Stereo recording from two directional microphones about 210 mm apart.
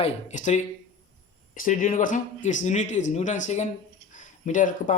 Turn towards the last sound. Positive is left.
turn(degrees=40)  # may be behind; listen again after turning